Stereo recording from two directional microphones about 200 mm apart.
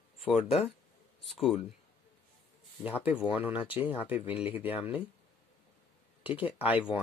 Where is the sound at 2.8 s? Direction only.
10° right (ahead or behind).